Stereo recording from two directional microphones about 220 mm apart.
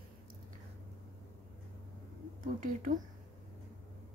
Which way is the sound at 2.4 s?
40° right (ahead or behind).